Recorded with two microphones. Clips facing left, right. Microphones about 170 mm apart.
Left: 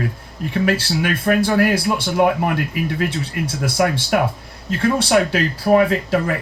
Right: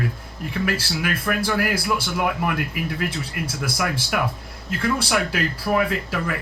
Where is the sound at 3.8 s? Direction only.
35° left (ahead or behind).